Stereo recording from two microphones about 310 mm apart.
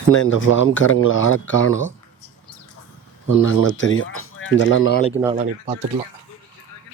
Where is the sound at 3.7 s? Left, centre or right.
Left.